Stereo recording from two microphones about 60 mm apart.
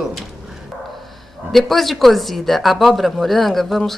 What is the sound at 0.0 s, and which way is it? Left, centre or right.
Speech, centre.